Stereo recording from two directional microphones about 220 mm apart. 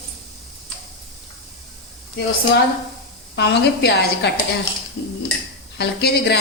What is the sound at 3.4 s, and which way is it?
Speech, 50° left (ahead or behind).